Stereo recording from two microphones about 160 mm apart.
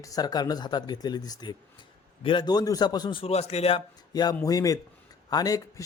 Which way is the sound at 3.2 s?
40° left (ahead or behind).